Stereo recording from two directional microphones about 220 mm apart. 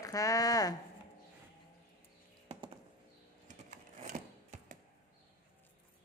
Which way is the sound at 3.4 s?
35° right (ahead or behind).